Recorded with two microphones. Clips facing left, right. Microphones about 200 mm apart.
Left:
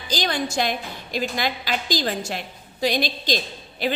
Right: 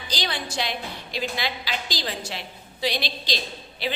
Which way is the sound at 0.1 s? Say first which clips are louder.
Left 6 dB; 45° left (ahead or behind).